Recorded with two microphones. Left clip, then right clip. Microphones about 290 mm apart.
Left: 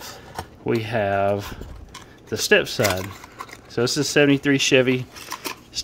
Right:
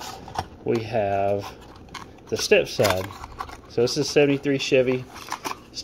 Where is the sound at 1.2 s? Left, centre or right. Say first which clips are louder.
Left 2 dB; left.